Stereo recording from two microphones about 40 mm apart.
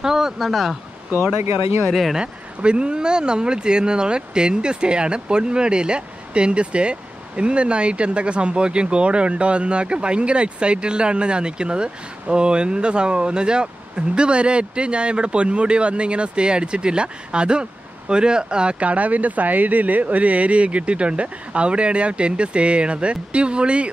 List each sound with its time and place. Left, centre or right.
0.0 s speech: centre
1.9 s speech: centre
2.1 s speech: right